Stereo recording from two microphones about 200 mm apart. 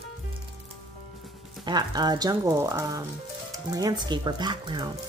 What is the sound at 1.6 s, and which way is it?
Speech, 20° right (ahead or behind).